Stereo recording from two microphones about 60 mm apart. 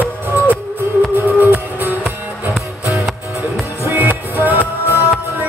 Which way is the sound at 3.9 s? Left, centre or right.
Right.